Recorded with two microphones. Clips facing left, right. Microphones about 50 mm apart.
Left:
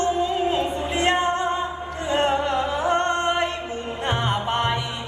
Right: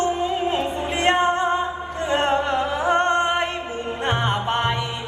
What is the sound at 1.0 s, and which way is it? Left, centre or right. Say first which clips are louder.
Music: right 3 dB; centre.